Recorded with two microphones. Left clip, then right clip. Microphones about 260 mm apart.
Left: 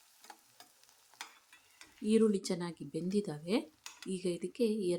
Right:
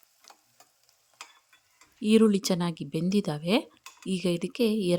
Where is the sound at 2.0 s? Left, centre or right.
Right.